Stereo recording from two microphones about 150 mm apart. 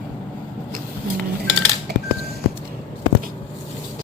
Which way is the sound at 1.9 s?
90° right.